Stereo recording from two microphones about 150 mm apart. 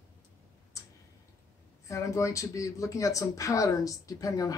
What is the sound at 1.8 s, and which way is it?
Speech, 20° left (ahead or behind).